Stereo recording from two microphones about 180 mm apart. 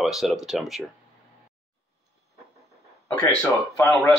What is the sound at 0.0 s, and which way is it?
Speech, centre (ahead or behind).